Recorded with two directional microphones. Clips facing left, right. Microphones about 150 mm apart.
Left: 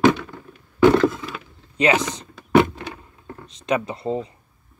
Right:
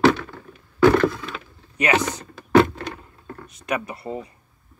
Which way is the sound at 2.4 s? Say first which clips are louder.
Even; 15° left (ahead or behind).